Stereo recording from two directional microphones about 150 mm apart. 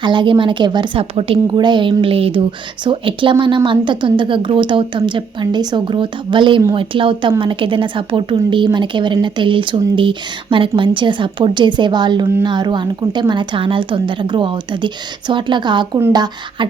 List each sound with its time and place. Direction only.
0.0 s speech: 30° right (ahead or behind)